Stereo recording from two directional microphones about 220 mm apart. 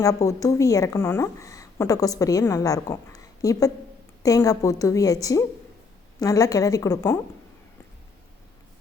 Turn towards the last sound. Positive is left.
turn(degrees=15)  # may be behind; listen again after turning